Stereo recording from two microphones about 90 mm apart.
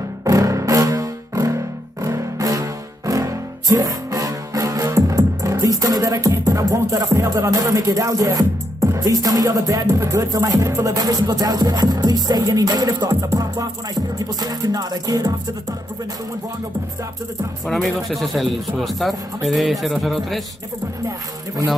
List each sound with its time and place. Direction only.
0.2 s music: 35° right (ahead or behind)
17.6 s speech: centre (ahead or behind)